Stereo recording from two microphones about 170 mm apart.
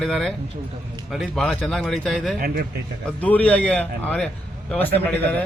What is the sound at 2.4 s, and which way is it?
Speech, 60° right (ahead or behind).